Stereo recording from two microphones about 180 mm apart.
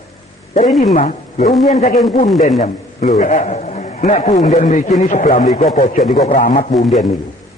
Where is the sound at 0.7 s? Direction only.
Centre (ahead or behind).